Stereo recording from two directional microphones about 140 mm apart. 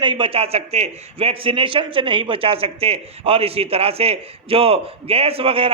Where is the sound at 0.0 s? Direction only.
35° right (ahead or behind).